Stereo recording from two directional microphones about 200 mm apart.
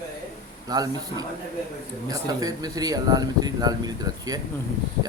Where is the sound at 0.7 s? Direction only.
20° right (ahead or behind).